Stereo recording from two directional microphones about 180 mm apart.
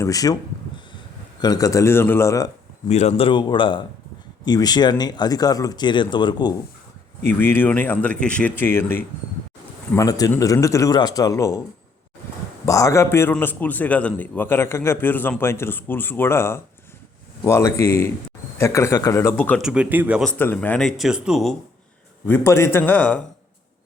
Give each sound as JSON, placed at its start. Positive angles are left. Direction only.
{"t": 0.0, "sound": "speech", "side_deg": 20}
{"t": 1.4, "sound": "a man's voice", "side_deg": 20}
{"t": 2.9, "sound": "speech", "side_deg": 35}
{"t": 7.3, "sound": "a man's voice", "side_deg": 10}
{"t": 12.6, "sound": "a man's voice", "side_deg": 20}
{"t": 19.6, "sound": "speech", "side_deg": -5}
{"t": 20.2, "sound": "speech", "side_deg": 10}
{"t": 22.3, "sound": "a man's voice", "side_deg": 15}